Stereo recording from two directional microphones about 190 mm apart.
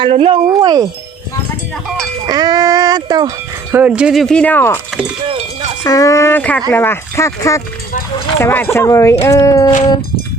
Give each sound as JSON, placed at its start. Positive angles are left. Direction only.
{"t": 0.0, "sound": "speech", "side_deg": -30}
{"t": 2.2, "sound": "speech", "side_deg": -20}
{"t": 5.2, "sound": "a sound", "side_deg": -30}
{"t": 5.8, "sound": "speech", "side_deg": 15}